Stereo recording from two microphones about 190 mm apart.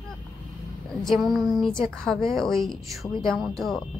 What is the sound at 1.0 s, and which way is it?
A woman's voice, centre (ahead or behind).